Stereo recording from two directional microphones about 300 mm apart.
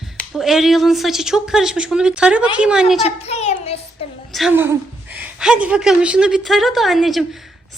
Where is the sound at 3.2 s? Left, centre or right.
Left.